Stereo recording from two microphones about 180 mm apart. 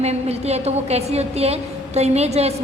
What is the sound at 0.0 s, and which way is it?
A woman's voice, 35° right (ahead or behind).